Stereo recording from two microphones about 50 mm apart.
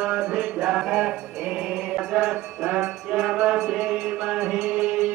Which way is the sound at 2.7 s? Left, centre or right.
Centre.